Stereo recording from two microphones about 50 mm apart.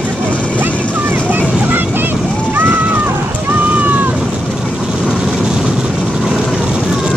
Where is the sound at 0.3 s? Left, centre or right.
Left.